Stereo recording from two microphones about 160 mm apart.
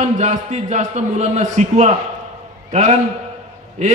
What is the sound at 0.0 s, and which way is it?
A man's voice, 45° right (ahead or behind).